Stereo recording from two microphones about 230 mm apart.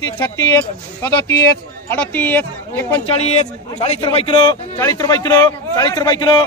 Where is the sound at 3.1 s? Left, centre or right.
Left.